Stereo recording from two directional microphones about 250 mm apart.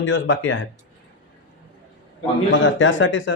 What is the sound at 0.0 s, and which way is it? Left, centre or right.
Speech, left.